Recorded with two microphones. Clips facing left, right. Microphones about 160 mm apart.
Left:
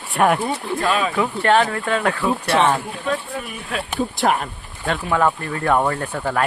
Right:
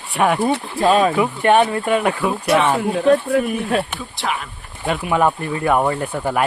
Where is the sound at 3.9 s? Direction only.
45° left (ahead or behind).